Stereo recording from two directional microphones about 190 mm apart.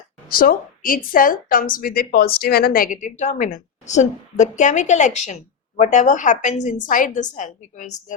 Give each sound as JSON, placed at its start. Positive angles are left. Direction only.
{"t": 0.3, "sound": "a woman's voice", "side_deg": 50}